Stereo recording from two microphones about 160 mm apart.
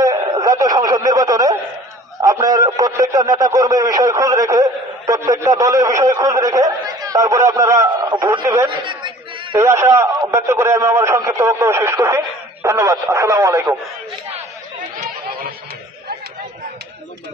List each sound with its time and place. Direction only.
0.0 s a sound: 20° right (ahead or behind)
2.2 s a man's voice: 25° right (ahead or behind)
8.6 s chatter: 30° right (ahead or behind)
9.6 s a man's voice: 15° right (ahead or behind)